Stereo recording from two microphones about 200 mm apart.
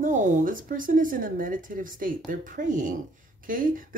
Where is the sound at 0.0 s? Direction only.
40° right (ahead or behind).